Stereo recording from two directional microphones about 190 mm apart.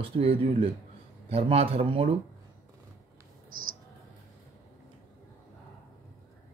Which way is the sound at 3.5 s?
50° right (ahead or behind).